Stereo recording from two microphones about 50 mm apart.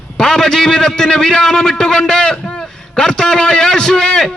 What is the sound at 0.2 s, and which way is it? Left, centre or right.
A man's voice, centre.